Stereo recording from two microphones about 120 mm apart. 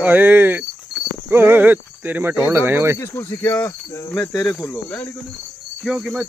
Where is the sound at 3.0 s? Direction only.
20° left (ahead or behind).